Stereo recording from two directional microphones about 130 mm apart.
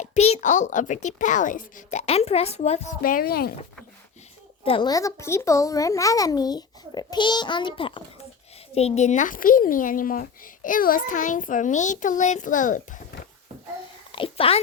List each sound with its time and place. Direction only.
0.0 s a woman's voice: 55° left (ahead or behind)
3.0 s a woman's voice: 90° left
4.6 s speech: 45° left (ahead or behind)
4.9 s a child's voice: 25° left (ahead or behind); by 8.0 s 40° left (ahead or behind)
8.7 s a woman's voice: 55° left (ahead or behind); by 13.0 s 85° left
14.1 s speech: 45° left (ahead or behind)